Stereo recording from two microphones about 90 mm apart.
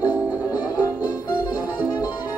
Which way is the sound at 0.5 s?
45° left (ahead or behind).